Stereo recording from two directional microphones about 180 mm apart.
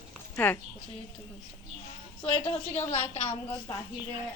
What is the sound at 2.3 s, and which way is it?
A woman's voice, 35° left (ahead or behind).